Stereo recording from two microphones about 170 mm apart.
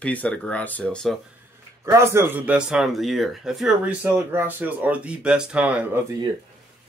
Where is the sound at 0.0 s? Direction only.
10° left (ahead or behind).